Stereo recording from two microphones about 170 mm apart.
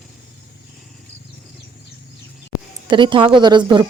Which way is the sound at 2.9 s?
30° right (ahead or behind).